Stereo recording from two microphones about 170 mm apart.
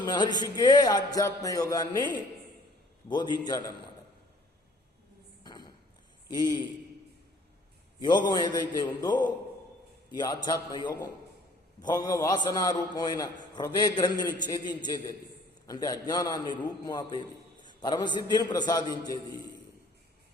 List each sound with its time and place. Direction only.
0.0 s speech: 25° left (ahead or behind)
5.4 s a sound: 25° left (ahead or behind)
6.2 s a man's voice: 25° left (ahead or behind)
8.0 s speech: 25° left (ahead or behind)